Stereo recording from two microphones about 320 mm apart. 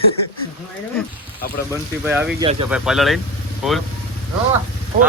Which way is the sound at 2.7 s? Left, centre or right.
Centre.